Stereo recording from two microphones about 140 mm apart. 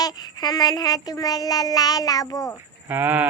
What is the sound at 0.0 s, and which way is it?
Child singing, 30° left (ahead or behind).